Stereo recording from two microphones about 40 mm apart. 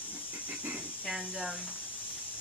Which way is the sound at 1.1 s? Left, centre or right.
Centre.